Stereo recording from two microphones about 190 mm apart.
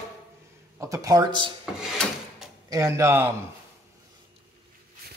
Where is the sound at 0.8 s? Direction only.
20° right (ahead or behind).